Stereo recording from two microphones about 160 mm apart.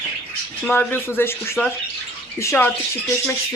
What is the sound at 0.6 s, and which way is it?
Speech, 10° left (ahead or behind).